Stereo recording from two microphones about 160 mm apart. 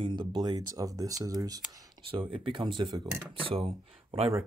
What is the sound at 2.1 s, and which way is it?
Speech, 35° right (ahead or behind).